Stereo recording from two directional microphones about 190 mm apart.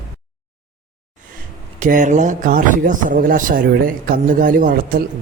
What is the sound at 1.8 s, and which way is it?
Speech, 40° right (ahead or behind).